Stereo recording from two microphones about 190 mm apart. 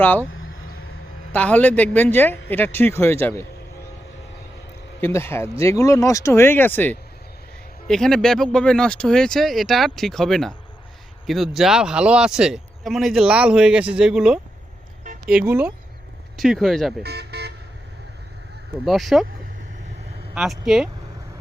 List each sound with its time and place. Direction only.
0.0 s speech: 10° left (ahead or behind)
1.3 s speech: 10° left (ahead or behind)
4.9 s speech: 10° left (ahead or behind)
17.0 s vehicle: 60° right (ahead or behind)
18.9 s speech: centre (ahead or behind)
20.3 s speech: centre (ahead or behind)